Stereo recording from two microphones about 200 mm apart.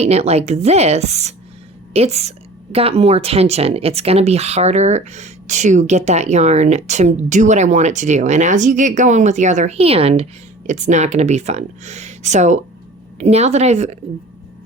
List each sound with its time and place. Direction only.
0.0 s a woman's voice: 30° right (ahead or behind)